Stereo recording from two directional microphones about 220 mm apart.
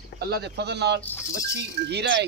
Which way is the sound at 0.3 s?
50° right (ahead or behind).